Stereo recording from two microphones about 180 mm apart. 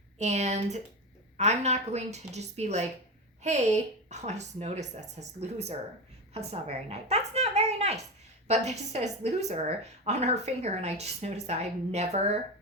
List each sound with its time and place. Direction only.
0.2 s a woman's voice: 40° right (ahead or behind)